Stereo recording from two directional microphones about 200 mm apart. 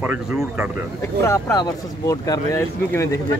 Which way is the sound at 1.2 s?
15° left (ahead or behind).